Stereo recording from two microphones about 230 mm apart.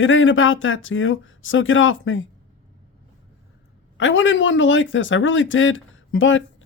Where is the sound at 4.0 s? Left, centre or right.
Left.